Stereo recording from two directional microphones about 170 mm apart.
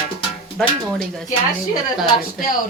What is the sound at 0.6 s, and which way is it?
Speech, centre (ahead or behind).